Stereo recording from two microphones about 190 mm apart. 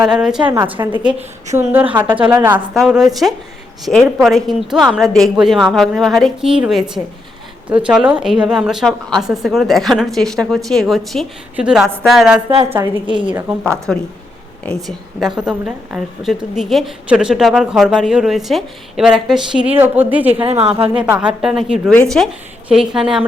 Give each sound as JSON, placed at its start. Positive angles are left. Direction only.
{"t": 0.0, "sound": "a woman's voice", "side_deg": -5}
{"t": 15.4, "sound": "a woman's voice", "side_deg": -5}
{"t": 20.4, "sound": "a woman's voice", "side_deg": -30}
{"t": 20.9, "sound": "a woman's voice", "side_deg": -5}